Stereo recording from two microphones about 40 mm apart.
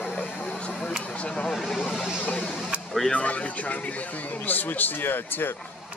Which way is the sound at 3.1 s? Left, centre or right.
Left.